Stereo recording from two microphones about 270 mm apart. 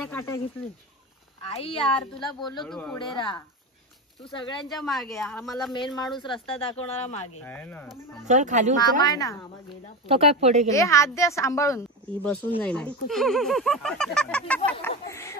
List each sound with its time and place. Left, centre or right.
0.0 s a woman's voice: centre
1.4 s a woman's voice: left
2.6 s speech: centre
3.0 s a woman's voice: centre
4.7 s speech: centre
6.1 s speech: centre
7.4 s a woman's voice: centre
8.3 s speech: right
8.7 s a woman's voice: centre
10.0 s speech: right
10.7 s a woman's voice: centre